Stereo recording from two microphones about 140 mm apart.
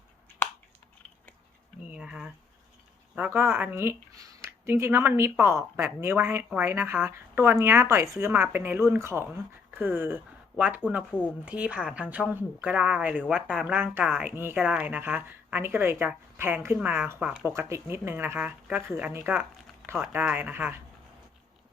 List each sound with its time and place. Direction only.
1.9 s speech: 5° right (ahead or behind)
10.8 s speech: 10° left (ahead or behind)
11.4 s speech: 10° right (ahead or behind)